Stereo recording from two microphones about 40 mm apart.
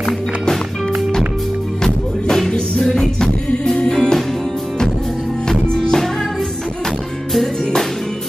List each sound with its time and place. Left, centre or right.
1.8 s music: centre
5.5 s music: centre